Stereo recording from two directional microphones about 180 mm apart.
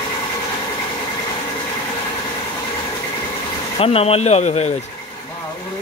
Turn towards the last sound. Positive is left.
turn(degrees=35)  # may be behind; listen again after turning